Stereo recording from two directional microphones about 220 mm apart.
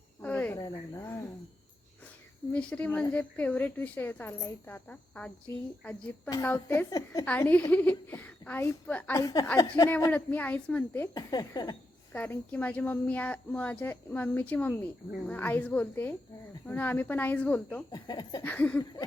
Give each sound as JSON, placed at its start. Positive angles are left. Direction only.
{"t": 0.2, "sound": "cricket", "side_deg": 5}
{"t": 0.6, "sound": "speech", "side_deg": 15}
{"t": 2.5, "sound": "a woman's voice", "side_deg": 5}
{"t": 12.1, "sound": "a woman's voice", "side_deg": 5}
{"t": 17.9, "sound": "a woman's voice", "side_deg": 20}